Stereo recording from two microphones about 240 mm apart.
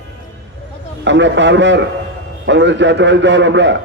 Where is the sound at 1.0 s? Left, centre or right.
Right.